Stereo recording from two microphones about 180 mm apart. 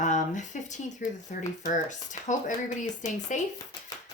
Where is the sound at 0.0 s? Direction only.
40° left (ahead or behind).